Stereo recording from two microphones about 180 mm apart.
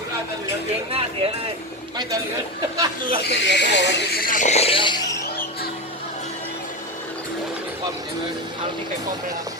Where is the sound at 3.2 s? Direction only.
75° left (ahead or behind).